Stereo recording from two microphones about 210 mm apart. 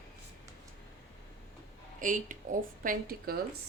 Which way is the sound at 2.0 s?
40° right (ahead or behind).